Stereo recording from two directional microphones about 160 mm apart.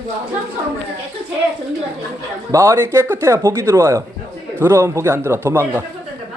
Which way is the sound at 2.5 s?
20° right (ahead or behind).